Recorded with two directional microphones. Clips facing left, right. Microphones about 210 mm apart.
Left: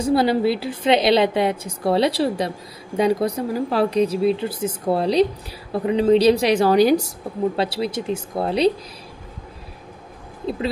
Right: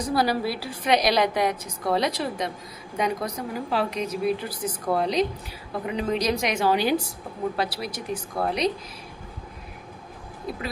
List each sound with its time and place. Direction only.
0.0 s a woman's voice: 25° left (ahead or behind); by 7.0 s 40° left (ahead or behind)
7.5 s a woman's voice: 25° left (ahead or behind)